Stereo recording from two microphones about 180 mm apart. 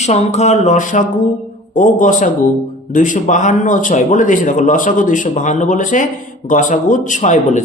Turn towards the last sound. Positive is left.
turn(degrees=45)  # may be behind; listen again after turning